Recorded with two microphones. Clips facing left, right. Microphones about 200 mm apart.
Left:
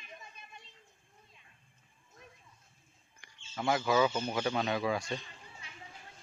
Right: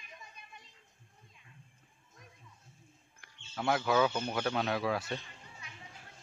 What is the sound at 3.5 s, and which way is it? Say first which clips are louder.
Speech: even; centre (ahead or behind).